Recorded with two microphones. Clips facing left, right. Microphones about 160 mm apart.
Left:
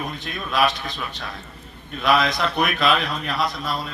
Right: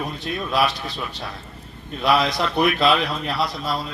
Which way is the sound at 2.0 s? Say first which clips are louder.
Even; 35° right (ahead or behind).